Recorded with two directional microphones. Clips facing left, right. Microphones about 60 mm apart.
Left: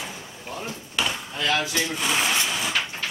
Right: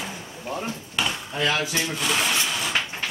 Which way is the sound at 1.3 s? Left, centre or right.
Right.